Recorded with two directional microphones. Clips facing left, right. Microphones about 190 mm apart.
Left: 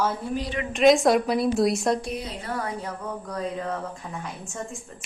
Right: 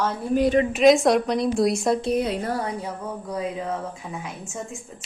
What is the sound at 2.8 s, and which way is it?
Speech, 10° right (ahead or behind).